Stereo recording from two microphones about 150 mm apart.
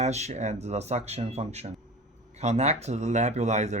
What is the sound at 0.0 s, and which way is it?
Speech, 50° right (ahead or behind).